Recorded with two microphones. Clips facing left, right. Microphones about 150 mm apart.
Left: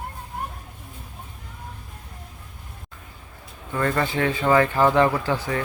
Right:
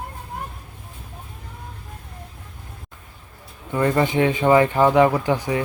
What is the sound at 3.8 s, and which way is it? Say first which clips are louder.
Speech: right 4 dB; 20° right (ahead or behind).